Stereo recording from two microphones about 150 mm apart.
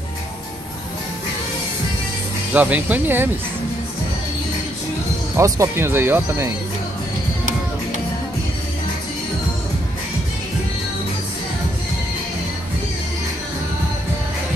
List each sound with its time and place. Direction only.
2.5 s speech: 10° right (ahead or behind)
5.3 s speech: 20° right (ahead or behind)